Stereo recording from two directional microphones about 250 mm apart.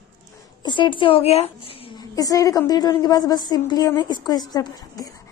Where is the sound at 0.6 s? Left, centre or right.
Centre.